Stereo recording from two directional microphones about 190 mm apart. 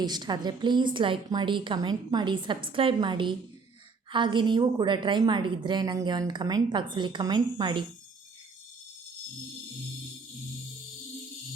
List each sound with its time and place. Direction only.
0.0 s a woman's voice: 20° right (ahead or behind)